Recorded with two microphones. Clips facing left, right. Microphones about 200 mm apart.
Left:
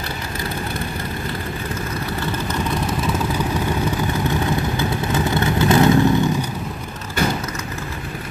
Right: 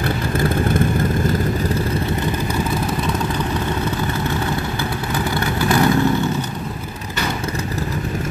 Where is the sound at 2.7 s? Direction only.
Centre (ahead or behind).